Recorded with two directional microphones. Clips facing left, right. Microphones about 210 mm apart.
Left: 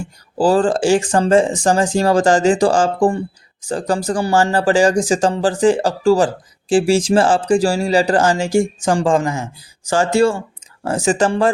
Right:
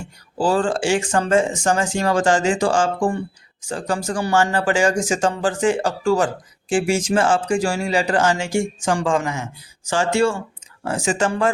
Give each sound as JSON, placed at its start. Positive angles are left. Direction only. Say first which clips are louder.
{"t": 0.3, "sound": "speech", "louder": "left 5 dB", "side_deg": 35}